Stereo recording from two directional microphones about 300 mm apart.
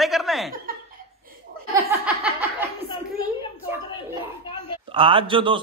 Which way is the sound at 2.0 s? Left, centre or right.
Centre.